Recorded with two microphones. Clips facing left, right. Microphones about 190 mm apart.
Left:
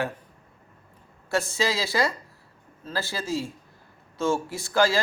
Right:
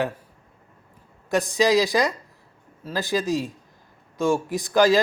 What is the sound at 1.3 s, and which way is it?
Speech, 15° right (ahead or behind).